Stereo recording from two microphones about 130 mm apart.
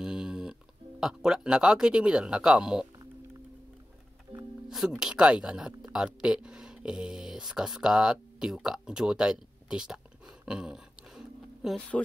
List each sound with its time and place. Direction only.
0.0 s speech: 5° right (ahead or behind)
4.6 s speech: 5° right (ahead or behind)
10.4 s a sound: 5° right (ahead or behind)